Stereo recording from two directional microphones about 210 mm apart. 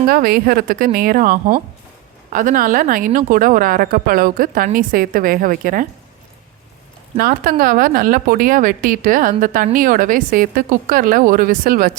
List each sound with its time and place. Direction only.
0.1 s a woman's voice: 45° right (ahead or behind)
7.2 s a woman's voice: 45° right (ahead or behind)